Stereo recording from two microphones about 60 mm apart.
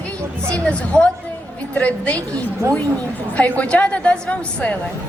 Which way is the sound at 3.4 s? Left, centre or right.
Left.